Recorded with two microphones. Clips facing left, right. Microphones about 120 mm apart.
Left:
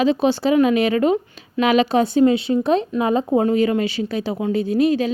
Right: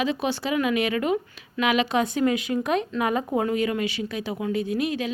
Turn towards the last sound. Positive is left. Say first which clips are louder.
# left 8 dB
turn(degrees=30)  # may be behind; listen again after turning